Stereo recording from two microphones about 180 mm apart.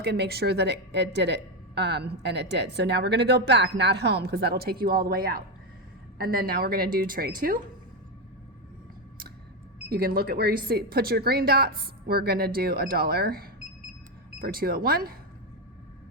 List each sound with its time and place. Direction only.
0.0 s a woman's voice: 65° right (ahead or behind)
9.9 s speech: 60° right (ahead or behind)